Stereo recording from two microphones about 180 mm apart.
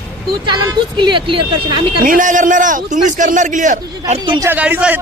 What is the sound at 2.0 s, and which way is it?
A man's voice, 45° right (ahead or behind).